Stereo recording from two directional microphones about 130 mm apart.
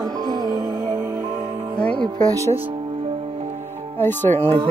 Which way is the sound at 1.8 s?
10° left (ahead or behind).